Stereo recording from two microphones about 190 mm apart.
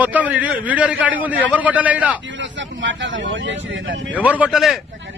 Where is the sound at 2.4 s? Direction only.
75° right (ahead or behind).